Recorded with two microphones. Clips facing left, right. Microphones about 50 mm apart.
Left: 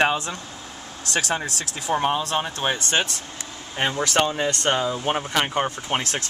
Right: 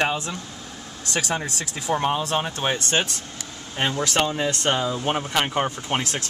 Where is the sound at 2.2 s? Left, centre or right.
Centre.